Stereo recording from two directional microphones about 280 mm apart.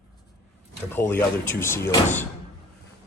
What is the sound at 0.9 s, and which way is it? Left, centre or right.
Speech, centre.